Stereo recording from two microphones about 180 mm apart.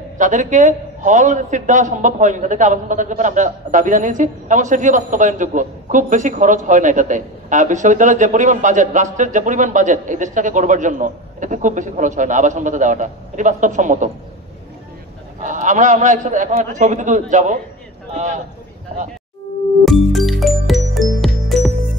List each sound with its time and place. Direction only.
0.2 s a man's voice: 45° right (ahead or behind)
15.4 s a man's voice: 45° right (ahead or behind)
19.8 s music: centre (ahead or behind)